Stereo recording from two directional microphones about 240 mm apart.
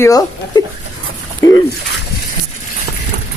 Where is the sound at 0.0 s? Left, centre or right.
Centre.